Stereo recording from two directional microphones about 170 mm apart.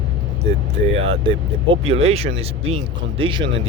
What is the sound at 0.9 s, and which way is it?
Speech, 35° right (ahead or behind).